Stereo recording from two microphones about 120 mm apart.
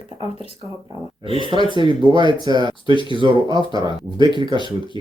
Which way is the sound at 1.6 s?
40° right (ahead or behind).